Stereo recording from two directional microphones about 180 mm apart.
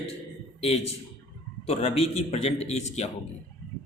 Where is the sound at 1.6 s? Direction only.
35° left (ahead or behind).